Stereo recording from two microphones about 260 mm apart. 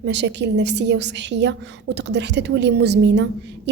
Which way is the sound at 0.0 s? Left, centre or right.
Right.